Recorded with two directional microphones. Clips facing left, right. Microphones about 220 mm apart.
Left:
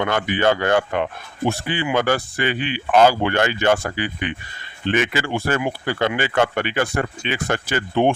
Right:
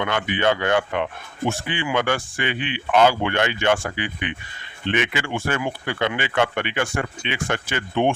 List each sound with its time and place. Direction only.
0.0 s speech: 40° left (ahead or behind)